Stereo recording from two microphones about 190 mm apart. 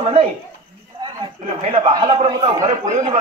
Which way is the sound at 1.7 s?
20° right (ahead or behind).